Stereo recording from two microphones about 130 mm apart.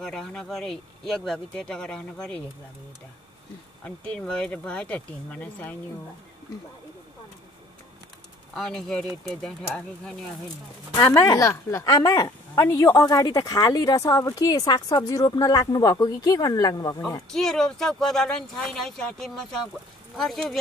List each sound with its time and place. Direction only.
0.0 s speech: 5° left (ahead or behind)
3.8 s speech: 10° left (ahead or behind)
8.5 s speech: 5° left (ahead or behind)
11.0 s a woman's voice: 30° left (ahead or behind)
17.3 s speech: 5° left (ahead or behind)